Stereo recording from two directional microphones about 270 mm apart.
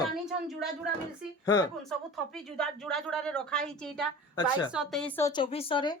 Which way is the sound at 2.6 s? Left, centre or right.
Centre.